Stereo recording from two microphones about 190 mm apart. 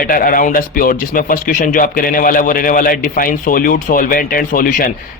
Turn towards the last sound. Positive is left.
turn(degrees=45)  # may be behind; listen again after turning